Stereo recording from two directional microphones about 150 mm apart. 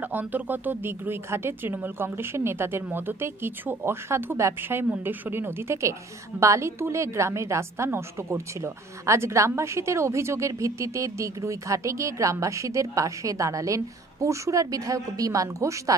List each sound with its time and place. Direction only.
0.0 s a woman's voice: 10° right (ahead or behind)